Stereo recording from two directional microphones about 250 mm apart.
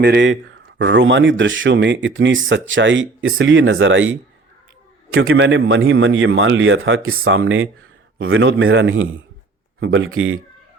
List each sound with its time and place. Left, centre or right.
0.0 s speech: right